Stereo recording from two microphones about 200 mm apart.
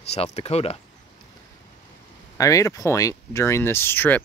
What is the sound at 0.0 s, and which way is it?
Speech, 30° left (ahead or behind).